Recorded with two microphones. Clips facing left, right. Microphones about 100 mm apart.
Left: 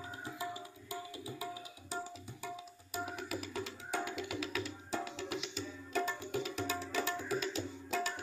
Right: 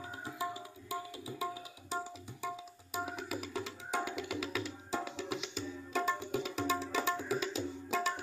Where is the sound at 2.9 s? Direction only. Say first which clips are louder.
Right 1 dB; 15° right (ahead or behind).